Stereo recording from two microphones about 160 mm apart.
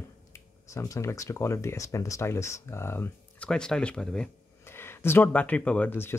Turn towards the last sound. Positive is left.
turn(degrees=10)  # may be behind; listen again after turning